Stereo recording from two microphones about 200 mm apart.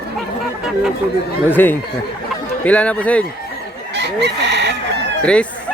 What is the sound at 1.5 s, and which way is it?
A man's voice, 10° left (ahead or behind).